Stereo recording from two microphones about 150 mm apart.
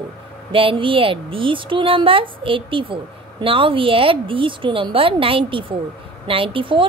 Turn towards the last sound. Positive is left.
turn(degrees=-35)  # may be behind; listen again after turning